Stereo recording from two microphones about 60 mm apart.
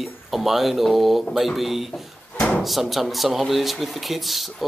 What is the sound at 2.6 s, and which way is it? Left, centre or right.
Speech, centre.